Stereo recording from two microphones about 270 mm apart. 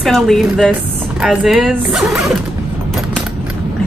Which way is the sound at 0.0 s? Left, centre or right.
Centre.